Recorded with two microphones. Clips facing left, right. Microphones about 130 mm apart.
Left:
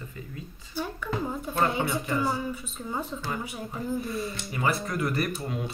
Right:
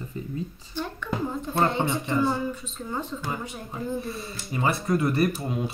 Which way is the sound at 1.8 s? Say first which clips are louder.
Right 2 dB; 25° right (ahead or behind).